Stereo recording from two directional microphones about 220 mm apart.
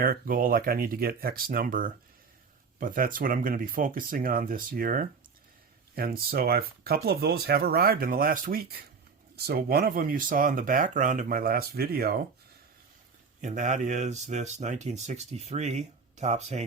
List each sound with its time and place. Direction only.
0.0 s speech: 40° right (ahead or behind)
13.4 s speech: 35° right (ahead or behind)